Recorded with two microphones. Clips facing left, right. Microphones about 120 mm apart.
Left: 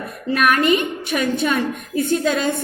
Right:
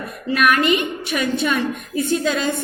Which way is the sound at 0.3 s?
40° left (ahead or behind).